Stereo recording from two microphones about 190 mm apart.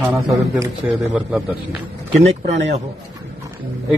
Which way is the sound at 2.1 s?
35° right (ahead or behind).